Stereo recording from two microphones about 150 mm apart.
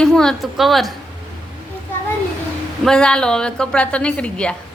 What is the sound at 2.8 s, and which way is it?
A woman's voice, 5° left (ahead or behind).